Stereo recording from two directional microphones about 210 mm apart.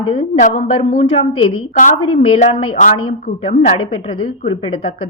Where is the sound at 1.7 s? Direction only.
40° left (ahead or behind).